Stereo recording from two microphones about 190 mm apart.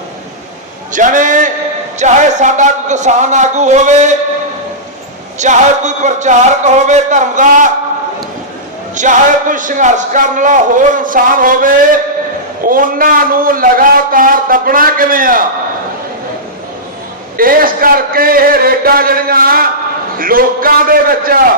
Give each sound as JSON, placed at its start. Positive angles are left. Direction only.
{"t": 0.9, "sound": "a man's voice", "side_deg": -40}
{"t": 5.4, "sound": "a man's voice", "side_deg": -40}
{"t": 9.0, "sound": "a man's voice", "side_deg": -40}
{"t": 17.3, "sound": "a man's voice", "side_deg": -50}